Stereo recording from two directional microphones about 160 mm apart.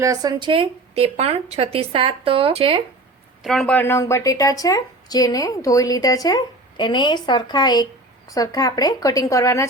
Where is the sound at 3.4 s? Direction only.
Centre (ahead or behind).